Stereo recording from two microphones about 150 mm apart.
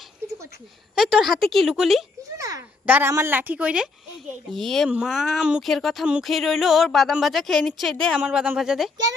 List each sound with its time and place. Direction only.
0.9 s speech: 5° right (ahead or behind)
2.4 s a sound: 20° right (ahead or behind)
2.8 s a woman's voice: 15° right (ahead or behind)
4.5 s speech: centre (ahead or behind)
8.2 s speech: 10° right (ahead or behind)